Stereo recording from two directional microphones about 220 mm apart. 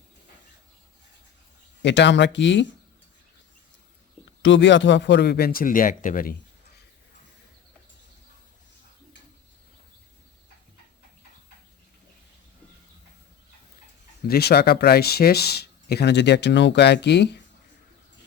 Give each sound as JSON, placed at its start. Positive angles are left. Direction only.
{"t": 1.8, "sound": "speech", "side_deg": 55}
{"t": 4.4, "sound": "speech", "side_deg": 55}
{"t": 14.3, "sound": "speech", "side_deg": 45}